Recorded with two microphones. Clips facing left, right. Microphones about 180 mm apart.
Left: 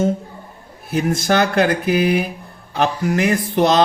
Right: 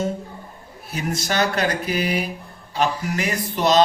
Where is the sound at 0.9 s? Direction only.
55° left (ahead or behind).